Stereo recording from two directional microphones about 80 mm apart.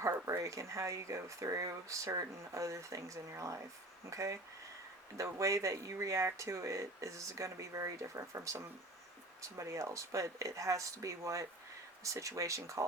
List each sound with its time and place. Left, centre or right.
0.3 s speech: right